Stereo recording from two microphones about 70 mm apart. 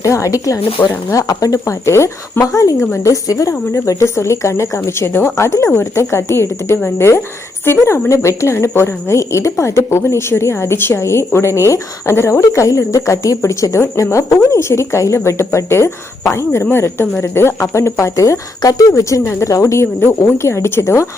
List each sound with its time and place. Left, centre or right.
0.0 s speech: left
3.8 s a woman's voice: left
18.6 s a woman's voice: left